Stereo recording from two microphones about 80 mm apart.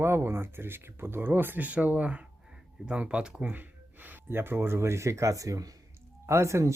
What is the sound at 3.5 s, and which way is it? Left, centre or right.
Speech, right.